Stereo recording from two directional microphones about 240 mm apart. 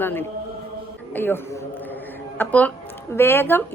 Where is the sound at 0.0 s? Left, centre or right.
Centre.